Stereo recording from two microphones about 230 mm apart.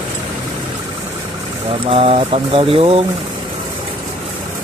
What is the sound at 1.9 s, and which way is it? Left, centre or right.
Speech, right.